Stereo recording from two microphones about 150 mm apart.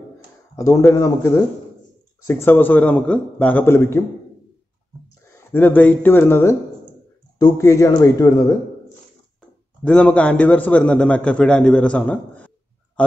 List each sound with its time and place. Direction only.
0.6 s a man's voice: 20° left (ahead or behind)
5.5 s a man's voice: 15° left (ahead or behind)
9.8 s a man's voice: 5° left (ahead or behind)